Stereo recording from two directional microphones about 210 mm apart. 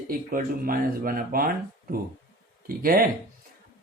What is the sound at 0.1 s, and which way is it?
Speech, 45° right (ahead or behind).